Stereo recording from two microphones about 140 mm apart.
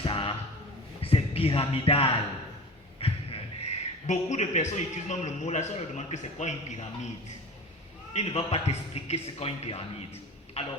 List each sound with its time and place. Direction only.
0.0 s a sound: 40° left (ahead or behind)
1.0 s a man's voice: 45° left (ahead or behind)
8.1 s a man's voice: 45° left (ahead or behind)